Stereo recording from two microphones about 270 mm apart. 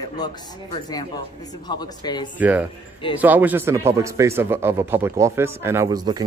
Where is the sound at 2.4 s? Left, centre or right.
Centre.